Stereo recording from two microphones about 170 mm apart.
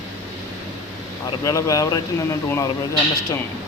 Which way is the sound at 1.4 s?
20° left (ahead or behind).